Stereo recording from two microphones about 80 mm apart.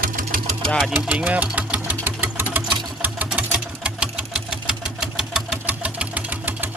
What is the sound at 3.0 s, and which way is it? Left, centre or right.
Sewing machine, right.